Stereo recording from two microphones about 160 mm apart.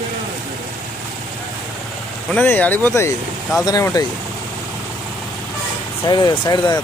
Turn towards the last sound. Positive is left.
turn(degrees=25)  # may be behind; listen again after turning